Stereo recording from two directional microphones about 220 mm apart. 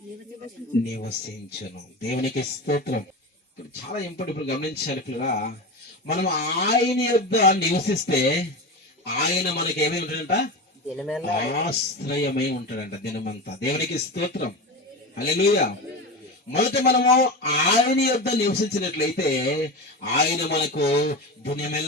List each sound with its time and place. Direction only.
1.6 s a man's voice: 45° left (ahead or behind)
10.8 s speech: centre (ahead or behind)
11.4 s a man's voice: 45° left (ahead or behind)